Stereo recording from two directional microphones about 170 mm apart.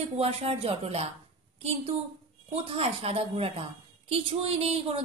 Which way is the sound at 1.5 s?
35° right (ahead or behind).